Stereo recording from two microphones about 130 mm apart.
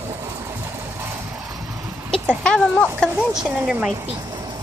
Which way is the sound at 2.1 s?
5° left (ahead or behind).